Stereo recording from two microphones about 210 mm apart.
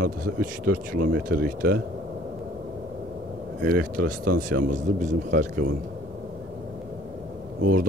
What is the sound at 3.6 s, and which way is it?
Speech, 45° right (ahead or behind).